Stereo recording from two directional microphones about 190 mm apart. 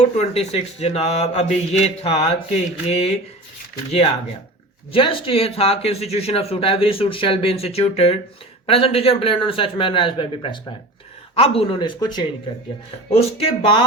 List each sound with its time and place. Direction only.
0.0 s speech: 35° left (ahead or behind)
4.9 s a man's voice: 30° left (ahead or behind)